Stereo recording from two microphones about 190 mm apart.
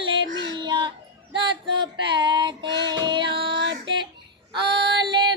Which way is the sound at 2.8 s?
25° right (ahead or behind).